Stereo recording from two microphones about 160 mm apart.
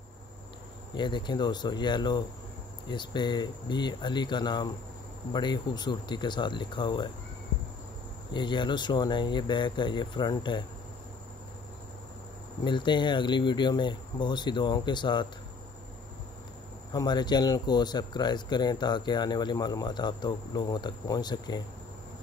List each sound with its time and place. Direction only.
0.9 s speech: 30° left (ahead or behind)
8.3 s speech: 30° left (ahead or behind)
12.6 s speech: 30° left (ahead or behind)
16.9 s speech: 25° left (ahead or behind)